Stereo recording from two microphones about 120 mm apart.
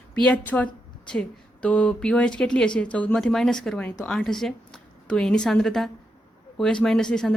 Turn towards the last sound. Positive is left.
turn(degrees=5)  # may be behind; listen again after turning